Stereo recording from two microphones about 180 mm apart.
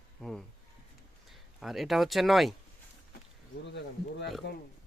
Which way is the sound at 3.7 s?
75° left (ahead or behind).